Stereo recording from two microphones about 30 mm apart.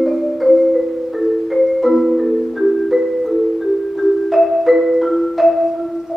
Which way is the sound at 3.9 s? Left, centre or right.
Centre.